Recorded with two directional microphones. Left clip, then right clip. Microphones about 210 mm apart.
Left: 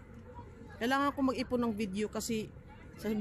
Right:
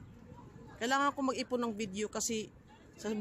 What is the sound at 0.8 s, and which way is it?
Speech, 5° right (ahead or behind).